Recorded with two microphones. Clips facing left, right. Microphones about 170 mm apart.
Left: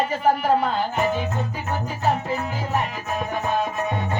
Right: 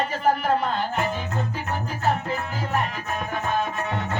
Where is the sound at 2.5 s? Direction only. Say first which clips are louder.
Left 1 dB; 10° left (ahead or behind).